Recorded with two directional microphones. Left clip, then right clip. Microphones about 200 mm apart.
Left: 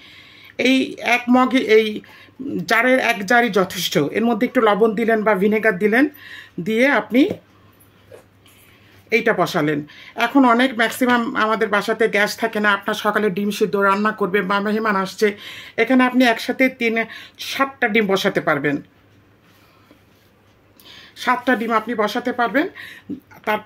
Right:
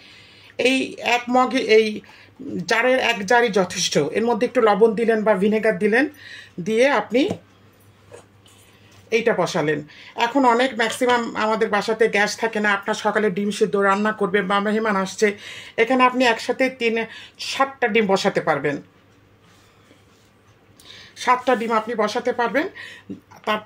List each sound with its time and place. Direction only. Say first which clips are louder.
0.0 s a woman's voice: left 3 dB; 40° left (ahead or behind)
9.1 s a woman's voice: left 2 dB; 40° left (ahead or behind)
20.8 s speech: even; 25° left (ahead or behind)